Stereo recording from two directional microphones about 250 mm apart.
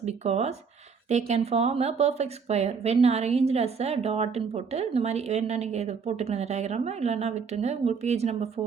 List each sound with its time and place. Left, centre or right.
0.0 s speech: right